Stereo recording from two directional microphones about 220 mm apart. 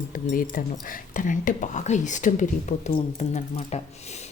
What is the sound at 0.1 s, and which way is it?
Speech, 35° left (ahead or behind).